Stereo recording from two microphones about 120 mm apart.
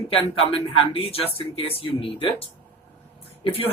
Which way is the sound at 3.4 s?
50° left (ahead or behind).